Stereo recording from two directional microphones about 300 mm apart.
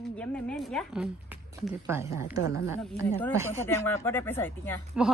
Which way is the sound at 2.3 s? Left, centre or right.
Left.